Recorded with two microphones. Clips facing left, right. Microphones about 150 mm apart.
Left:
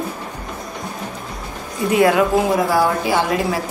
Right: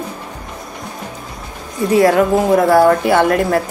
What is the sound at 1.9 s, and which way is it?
Speech, 40° right (ahead or behind).